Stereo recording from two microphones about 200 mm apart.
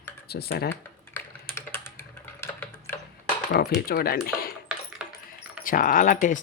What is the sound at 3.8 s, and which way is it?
Speech, 50° left (ahead or behind).